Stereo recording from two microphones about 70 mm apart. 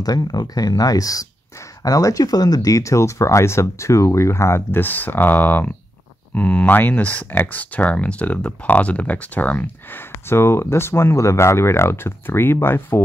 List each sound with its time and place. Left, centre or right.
0.0 s speech: left